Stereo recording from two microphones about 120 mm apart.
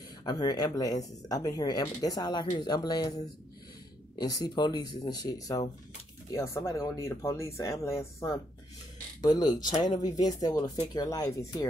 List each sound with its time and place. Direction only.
0.2 s speech: 35° left (ahead or behind)
9.2 s speech: 35° left (ahead or behind)